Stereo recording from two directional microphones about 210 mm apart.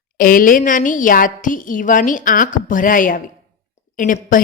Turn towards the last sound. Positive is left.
turn(degrees=40)  # may be behind; listen again after turning